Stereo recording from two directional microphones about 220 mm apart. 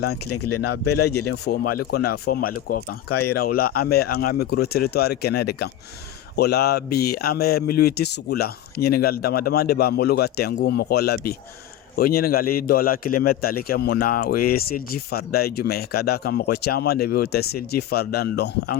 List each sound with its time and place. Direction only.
0.3 s speech: 90° left
1.9 s a man's voice: 45° left (ahead or behind)